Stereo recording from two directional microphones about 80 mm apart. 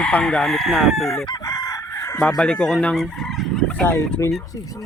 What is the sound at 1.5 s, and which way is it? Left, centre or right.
Chicken, left.